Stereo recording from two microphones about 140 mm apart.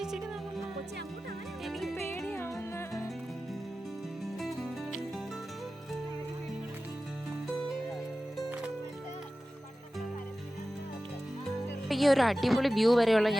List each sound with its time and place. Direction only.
0.0 s music: 5° right (ahead or behind)
1.6 s music: centre (ahead or behind)
2.0 s music: 15° left (ahead or behind)
4.4 s music: centre (ahead or behind)
11.9 s a woman's voice: centre (ahead or behind)